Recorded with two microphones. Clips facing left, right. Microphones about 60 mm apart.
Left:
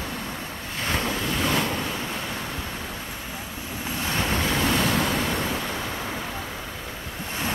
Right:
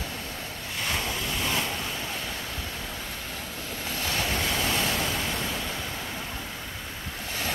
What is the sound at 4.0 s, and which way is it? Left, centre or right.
Waves, left.